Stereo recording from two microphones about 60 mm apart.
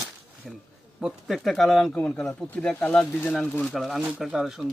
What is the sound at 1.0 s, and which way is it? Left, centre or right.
Speech, centre.